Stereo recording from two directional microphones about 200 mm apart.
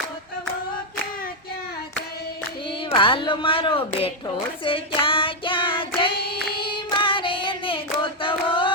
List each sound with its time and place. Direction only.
2.9 s speech: 25° left (ahead or behind)
4.6 s child singing: 25° left (ahead or behind)
6.6 s singing: 25° left (ahead or behind)